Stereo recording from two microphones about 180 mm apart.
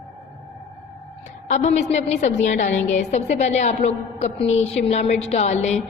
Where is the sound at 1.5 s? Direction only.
40° left (ahead or behind).